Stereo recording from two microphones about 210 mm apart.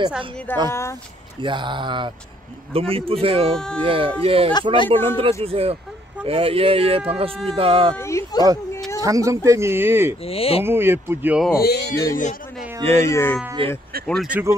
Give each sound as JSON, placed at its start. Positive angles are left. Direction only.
{"t": 0.7, "sound": "speech", "side_deg": 15}
{"t": 1.4, "sound": "speech", "side_deg": -20}
{"t": 3.5, "sound": "speech", "side_deg": 5}
{"t": 3.8, "sound": "speech", "side_deg": -25}
{"t": 7.9, "sound": "a sound", "side_deg": 15}
{"t": 9.0, "sound": "speech", "side_deg": -15}
{"t": 10.2, "sound": "speech", "side_deg": 25}
{"t": 10.6, "sound": "speech", "side_deg": -10}
{"t": 11.5, "sound": "speech", "side_deg": 50}
{"t": 12.8, "sound": "speech", "side_deg": 15}
{"t": 13.6, "sound": "speech", "side_deg": -25}
{"t": 14.0, "sound": "speech", "side_deg": 0}